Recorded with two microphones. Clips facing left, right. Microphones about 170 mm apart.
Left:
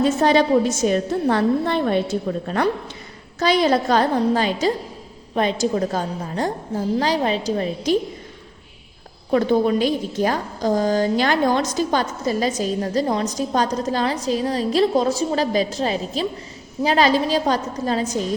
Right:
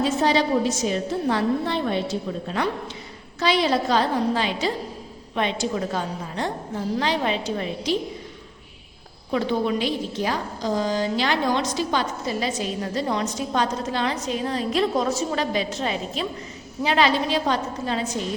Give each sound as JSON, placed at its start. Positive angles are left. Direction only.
{"t": 0.0, "sound": "a woman's voice", "side_deg": 50}
{"t": 9.3, "sound": "a woman's voice", "side_deg": 45}